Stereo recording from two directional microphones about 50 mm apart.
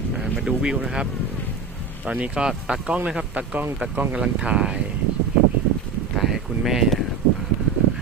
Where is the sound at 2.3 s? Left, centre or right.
Centre.